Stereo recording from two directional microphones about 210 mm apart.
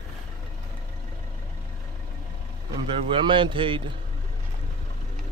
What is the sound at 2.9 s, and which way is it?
Speech, 25° right (ahead or behind).